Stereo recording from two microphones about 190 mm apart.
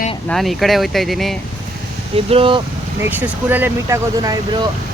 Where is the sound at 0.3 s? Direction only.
Centre (ahead or behind).